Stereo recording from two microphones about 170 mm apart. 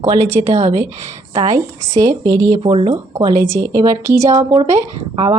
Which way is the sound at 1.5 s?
20° right (ahead or behind).